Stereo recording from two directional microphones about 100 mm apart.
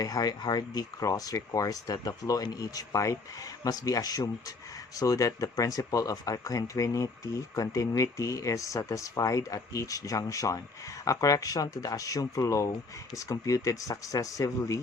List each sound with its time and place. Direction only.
0.0 s speech: 40° left (ahead or behind)